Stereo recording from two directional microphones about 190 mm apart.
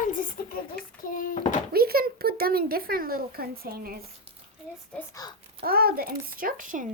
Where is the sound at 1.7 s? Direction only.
55° right (ahead or behind).